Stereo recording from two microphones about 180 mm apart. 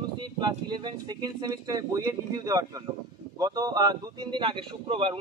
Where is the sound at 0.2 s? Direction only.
25° right (ahead or behind).